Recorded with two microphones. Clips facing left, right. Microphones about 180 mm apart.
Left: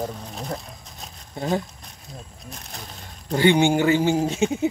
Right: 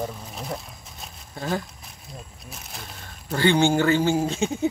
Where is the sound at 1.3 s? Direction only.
20° left (ahead or behind).